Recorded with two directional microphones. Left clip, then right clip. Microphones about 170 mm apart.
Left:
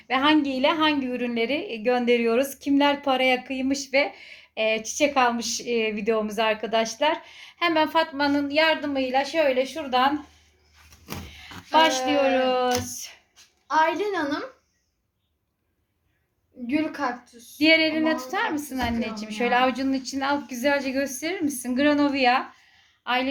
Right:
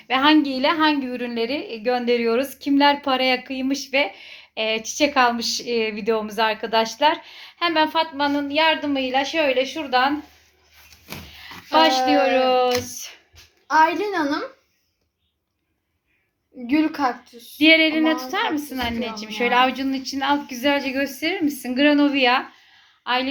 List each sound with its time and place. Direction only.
0.1 s a woman's voice: centre (ahead or behind)
11.3 s a woman's voice: 5° right (ahead or behind)
13.7 s a woman's voice: 30° right (ahead or behind)
16.6 s a woman's voice: 35° right (ahead or behind)
17.6 s a woman's voice: centre (ahead or behind)